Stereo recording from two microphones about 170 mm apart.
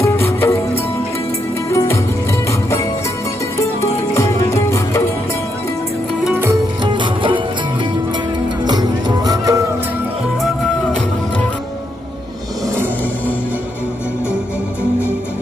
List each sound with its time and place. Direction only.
0.0 s music: 15° left (ahead or behind)
1.7 s music: 15° left (ahead or behind)
6.2 s music: 15° right (ahead or behind)
6.8 s music: 30° right (ahead or behind)
8.6 s music: 25° right (ahead or behind)